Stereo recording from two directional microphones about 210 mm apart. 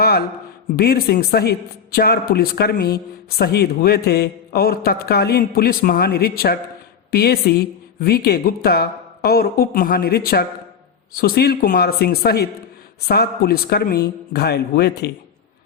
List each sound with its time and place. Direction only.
0.0 s a man's voice: 50° left (ahead or behind)